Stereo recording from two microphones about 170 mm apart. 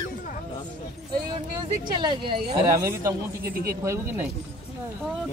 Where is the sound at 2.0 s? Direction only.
30° right (ahead or behind).